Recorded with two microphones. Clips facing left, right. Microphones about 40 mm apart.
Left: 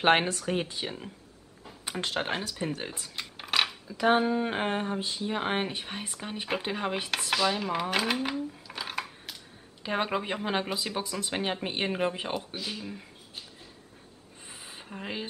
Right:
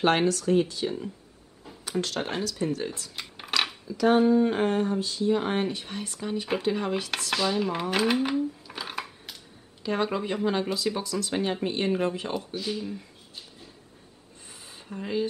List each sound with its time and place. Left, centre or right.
0.0 s speech: left
3.2 s a sound: centre
3.8 s speech: left
7.3 s dishes: centre
9.8 s speech: left
12.5 s speech: centre
14.5 s a sound: left